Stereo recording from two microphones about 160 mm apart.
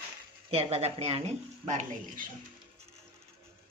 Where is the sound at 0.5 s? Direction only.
40° right (ahead or behind).